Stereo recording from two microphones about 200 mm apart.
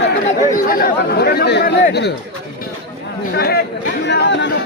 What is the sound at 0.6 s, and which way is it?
Speech, 45° left (ahead or behind).